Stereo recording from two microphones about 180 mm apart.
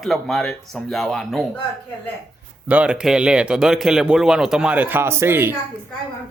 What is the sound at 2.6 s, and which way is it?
Speech, 5° right (ahead or behind).